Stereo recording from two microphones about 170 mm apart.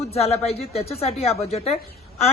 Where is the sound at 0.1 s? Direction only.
35° left (ahead or behind).